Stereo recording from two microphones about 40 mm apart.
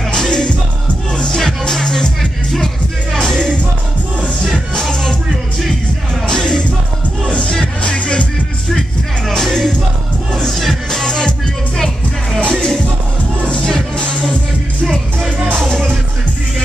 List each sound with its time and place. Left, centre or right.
0.1 s music: centre
2.5 s music: centre
3.3 s music: left
4.7 s music: centre
6.2 s music: centre
9.3 s music: centre
10.9 s music: centre
12.4 s music: centre